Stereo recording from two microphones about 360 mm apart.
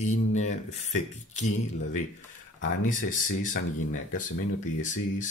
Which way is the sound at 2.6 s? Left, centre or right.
Left.